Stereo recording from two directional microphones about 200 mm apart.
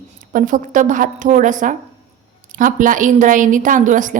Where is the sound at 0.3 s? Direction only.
40° right (ahead or behind).